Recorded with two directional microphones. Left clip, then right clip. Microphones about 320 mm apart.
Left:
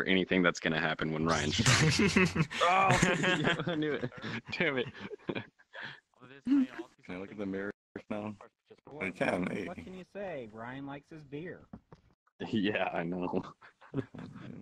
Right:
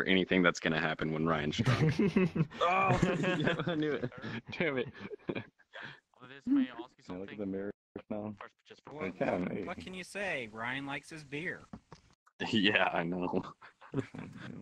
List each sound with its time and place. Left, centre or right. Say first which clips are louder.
0.0 s speech: even; centre
1.7 s speech: left 5 dB; left
2.6 s speech: left 3 dB; centre
2.9 s speech: left 4 dB; left
3.5 s speech: even; centre
6.5 s speech: left 2 dB; left
7.1 s a sound: even; left
8.9 s speech: left 1 dB; left
9.7 s speech: right 3 dB; right
12.4 s speech: right 4 dB; right
12.9 s speech: right 1 dB; centre